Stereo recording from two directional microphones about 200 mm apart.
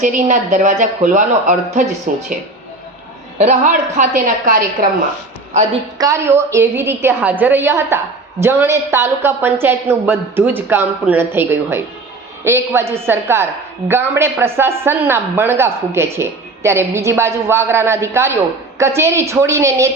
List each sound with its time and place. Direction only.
0.0 s a woman's voice: 40° right (ahead or behind)
3.3 s a woman's voice: 35° right (ahead or behind)
6.0 s a woman's voice: 15° right (ahead or behind)